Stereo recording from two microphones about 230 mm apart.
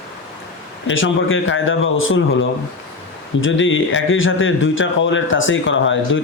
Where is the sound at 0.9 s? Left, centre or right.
Left.